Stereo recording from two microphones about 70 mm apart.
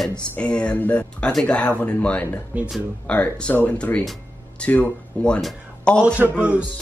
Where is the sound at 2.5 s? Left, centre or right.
Centre.